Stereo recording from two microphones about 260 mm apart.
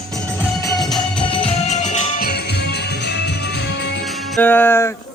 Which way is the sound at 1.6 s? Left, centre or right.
Left.